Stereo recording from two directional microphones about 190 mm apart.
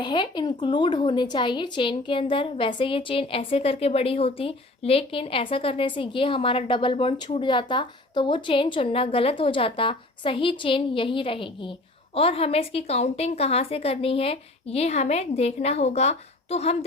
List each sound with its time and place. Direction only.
0.0 s a woman's voice: 25° left (ahead or behind)